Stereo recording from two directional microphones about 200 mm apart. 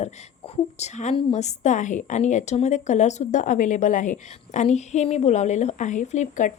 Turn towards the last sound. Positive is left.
turn(degrees=35)  # may be behind; listen again after turning